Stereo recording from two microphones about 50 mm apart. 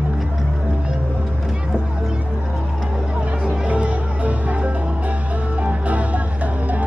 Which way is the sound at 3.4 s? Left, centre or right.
Right.